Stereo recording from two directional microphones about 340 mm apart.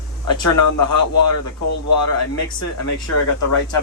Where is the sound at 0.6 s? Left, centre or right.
Left.